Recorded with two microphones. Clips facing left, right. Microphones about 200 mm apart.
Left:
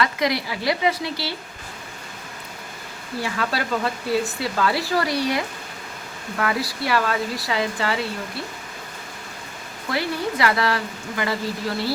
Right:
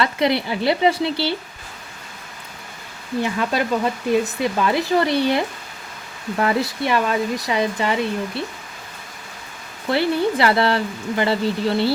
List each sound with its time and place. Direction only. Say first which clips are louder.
0.0 s speech: right 3 dB; 30° right (ahead or behind)
3.2 s speech: right 3 dB; 20° right (ahead or behind)
9.9 s speech: right 6 dB; 30° right (ahead or behind)